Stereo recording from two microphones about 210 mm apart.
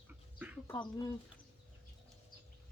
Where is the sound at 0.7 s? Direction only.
20° left (ahead or behind).